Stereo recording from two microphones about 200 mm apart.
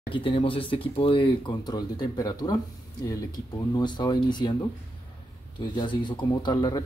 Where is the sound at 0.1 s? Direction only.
25° left (ahead or behind).